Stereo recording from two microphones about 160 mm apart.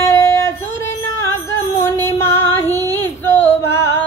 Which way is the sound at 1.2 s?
20° left (ahead or behind).